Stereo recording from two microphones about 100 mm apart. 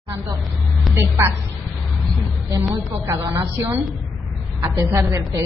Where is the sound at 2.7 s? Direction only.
35° right (ahead or behind).